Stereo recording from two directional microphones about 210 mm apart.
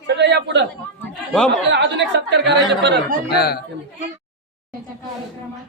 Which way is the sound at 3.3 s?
50° left (ahead or behind).